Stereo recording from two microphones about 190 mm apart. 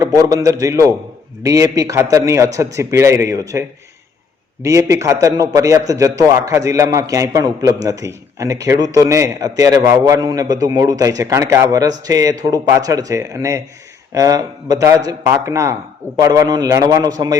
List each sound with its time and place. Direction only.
0.0 s a man's voice: 20° right (ahead or behind)
4.6 s a man's voice: 15° right (ahead or behind)